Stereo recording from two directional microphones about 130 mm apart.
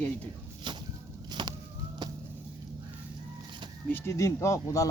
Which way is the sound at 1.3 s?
35° right (ahead or behind).